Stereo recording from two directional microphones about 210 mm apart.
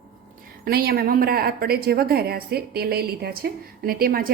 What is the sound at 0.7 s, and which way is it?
A woman's voice, 45° right (ahead or behind).